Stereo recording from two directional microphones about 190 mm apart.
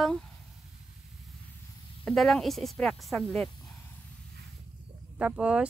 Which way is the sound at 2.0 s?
Centre (ahead or behind).